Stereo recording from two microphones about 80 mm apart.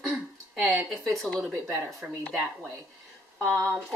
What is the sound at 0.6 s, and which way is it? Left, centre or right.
Speech, right.